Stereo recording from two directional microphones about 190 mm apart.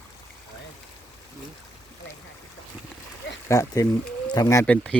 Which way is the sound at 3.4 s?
15° left (ahead or behind).